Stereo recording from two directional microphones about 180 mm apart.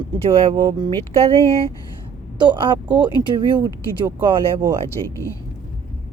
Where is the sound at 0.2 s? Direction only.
35° right (ahead or behind).